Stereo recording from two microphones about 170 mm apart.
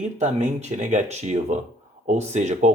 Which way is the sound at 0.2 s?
45° right (ahead or behind).